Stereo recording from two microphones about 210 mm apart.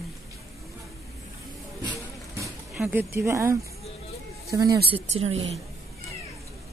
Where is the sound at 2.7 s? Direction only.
10° right (ahead or behind).